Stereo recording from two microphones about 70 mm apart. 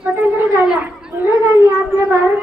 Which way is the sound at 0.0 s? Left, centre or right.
Right.